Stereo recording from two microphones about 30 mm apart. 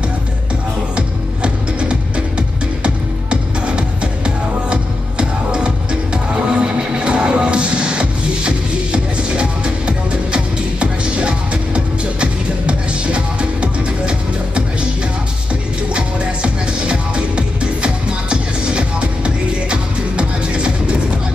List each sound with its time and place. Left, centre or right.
0.9 s music: right
15.9 s music: right